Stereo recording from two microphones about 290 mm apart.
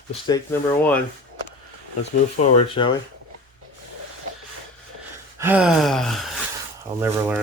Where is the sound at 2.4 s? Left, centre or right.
Centre.